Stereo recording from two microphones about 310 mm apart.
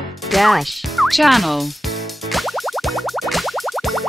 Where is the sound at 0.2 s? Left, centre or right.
Centre.